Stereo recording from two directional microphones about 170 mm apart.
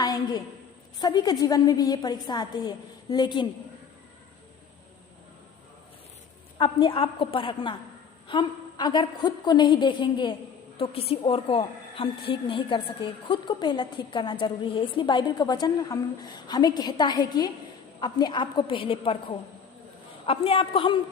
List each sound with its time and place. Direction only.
0.0 s a sound: 25° left (ahead or behind)
0.9 s a woman's voice: 25° left (ahead or behind)
6.6 s a woman's voice: 30° left (ahead or behind)